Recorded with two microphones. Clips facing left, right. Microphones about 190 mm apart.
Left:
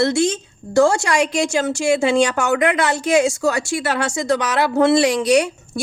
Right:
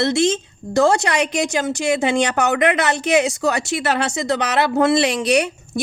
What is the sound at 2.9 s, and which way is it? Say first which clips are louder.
A woman's voice: left 1 dB; 20° right (ahead or behind).